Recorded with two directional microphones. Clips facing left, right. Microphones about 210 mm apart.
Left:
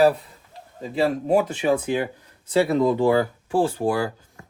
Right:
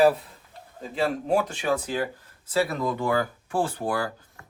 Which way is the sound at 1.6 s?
20° left (ahead or behind).